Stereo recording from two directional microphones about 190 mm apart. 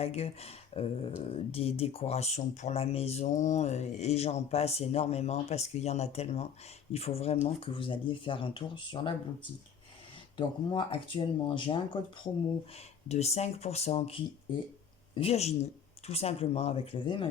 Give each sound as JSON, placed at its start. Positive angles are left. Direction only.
{"t": 0.0, "sound": "speech", "side_deg": 30}
{"t": 10.3, "sound": "speech", "side_deg": 25}